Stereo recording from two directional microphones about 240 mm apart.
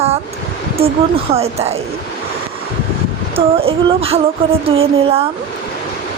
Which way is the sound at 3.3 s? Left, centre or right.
Right.